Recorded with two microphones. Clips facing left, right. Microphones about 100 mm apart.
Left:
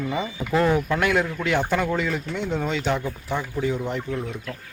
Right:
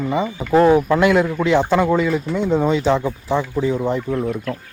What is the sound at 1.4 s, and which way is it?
Speech, 25° right (ahead or behind).